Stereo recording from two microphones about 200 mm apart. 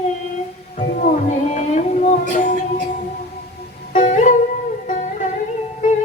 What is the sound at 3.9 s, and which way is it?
Music, 35° left (ahead or behind).